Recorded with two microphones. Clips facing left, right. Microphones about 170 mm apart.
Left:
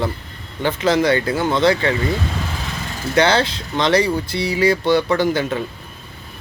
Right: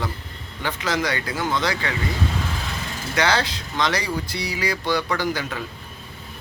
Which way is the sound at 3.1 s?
25° left (ahead or behind).